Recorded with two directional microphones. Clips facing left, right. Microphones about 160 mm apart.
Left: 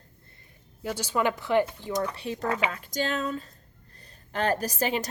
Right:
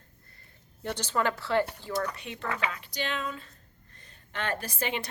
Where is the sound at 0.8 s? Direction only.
10° left (ahead or behind).